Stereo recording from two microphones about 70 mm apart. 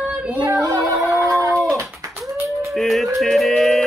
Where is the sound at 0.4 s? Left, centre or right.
Right.